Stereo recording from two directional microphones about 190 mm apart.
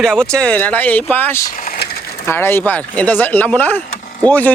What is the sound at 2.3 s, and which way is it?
Speech, 10° left (ahead or behind).